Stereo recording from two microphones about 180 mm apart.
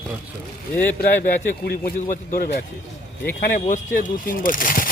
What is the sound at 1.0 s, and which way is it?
Speech, 60° left (ahead or behind).